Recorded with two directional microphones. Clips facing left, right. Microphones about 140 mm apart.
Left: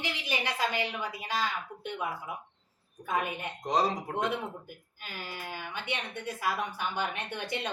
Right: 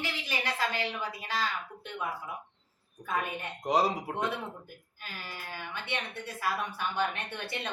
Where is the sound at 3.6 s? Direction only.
10° right (ahead or behind).